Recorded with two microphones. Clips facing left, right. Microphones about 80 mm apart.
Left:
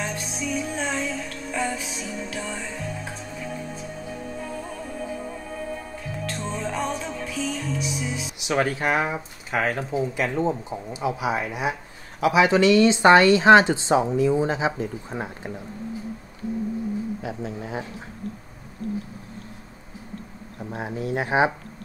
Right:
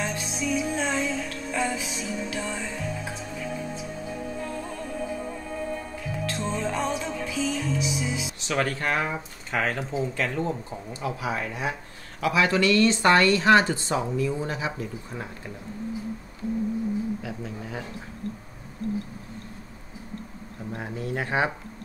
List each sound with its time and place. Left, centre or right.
0.0 s music: centre
8.4 s speech: centre
17.2 s speech: left
20.7 s speech: centre